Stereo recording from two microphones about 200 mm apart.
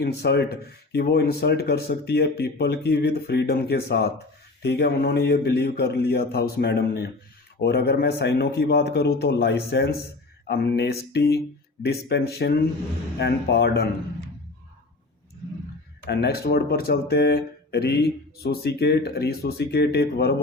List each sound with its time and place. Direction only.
0.0 s a man's voice: 55° left (ahead or behind)
16.0 s speech: 55° left (ahead or behind)